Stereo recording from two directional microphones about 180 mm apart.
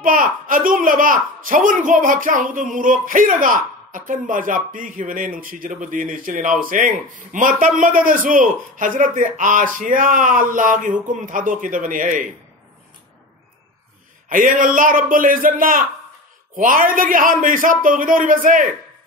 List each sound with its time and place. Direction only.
0.0 s a woman's voice: 50° right (ahead or behind)
14.3 s a woman's voice: 50° right (ahead or behind)